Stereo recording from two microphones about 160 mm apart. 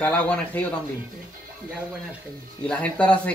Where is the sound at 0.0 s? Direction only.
10° left (ahead or behind).